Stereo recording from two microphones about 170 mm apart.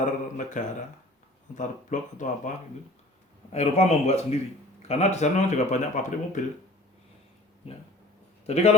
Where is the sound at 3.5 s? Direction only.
40° left (ahead or behind).